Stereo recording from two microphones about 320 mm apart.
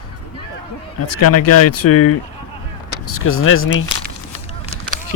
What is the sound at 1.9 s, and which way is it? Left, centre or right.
Speech, left.